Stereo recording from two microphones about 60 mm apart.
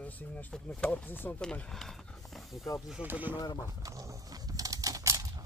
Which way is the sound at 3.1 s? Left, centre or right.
Right.